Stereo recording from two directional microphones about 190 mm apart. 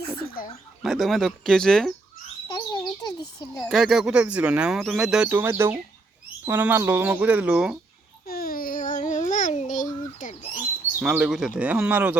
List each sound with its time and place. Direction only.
0.8 s speech: centre (ahead or behind)
2.6 s bird: 20° left (ahead or behind)
3.5 s speech: centre (ahead or behind)
8.3 s babbling: 50° left (ahead or behind)
11.0 s speech: 5° right (ahead or behind)